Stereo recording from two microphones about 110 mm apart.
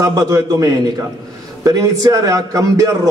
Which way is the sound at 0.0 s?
30° right (ahead or behind).